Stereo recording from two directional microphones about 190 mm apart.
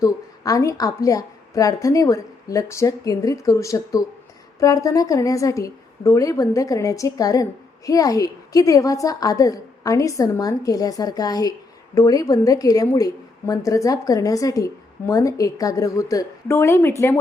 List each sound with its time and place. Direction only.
0.0 s a woman's voice: 20° left (ahead or behind)